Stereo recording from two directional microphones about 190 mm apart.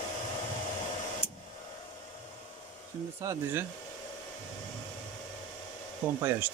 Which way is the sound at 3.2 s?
15° right (ahead or behind).